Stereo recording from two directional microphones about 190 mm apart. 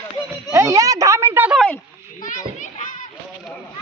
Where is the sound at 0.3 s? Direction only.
15° right (ahead or behind).